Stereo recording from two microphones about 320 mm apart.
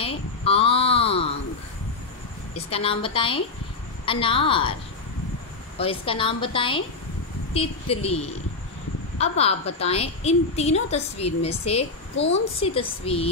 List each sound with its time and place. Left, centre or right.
0.0 s a sound: centre
2.5 s a woman's voice: centre
5.8 s a woman's voice: centre